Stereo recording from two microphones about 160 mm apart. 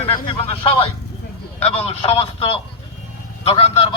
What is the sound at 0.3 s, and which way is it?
A man's voice, 35° left (ahead or behind).